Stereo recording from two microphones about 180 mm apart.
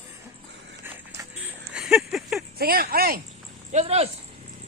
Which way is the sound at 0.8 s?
10° right (ahead or behind).